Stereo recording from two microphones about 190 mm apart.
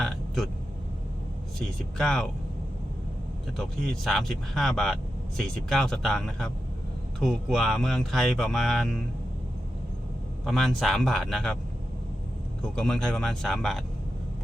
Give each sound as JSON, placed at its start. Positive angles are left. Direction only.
{"t": 1.5, "sound": "speech", "side_deg": 0}
{"t": 3.6, "sound": "speech", "side_deg": 0}
{"t": 10.4, "sound": "speech", "side_deg": 0}
{"t": 12.6, "sound": "speech", "side_deg": 5}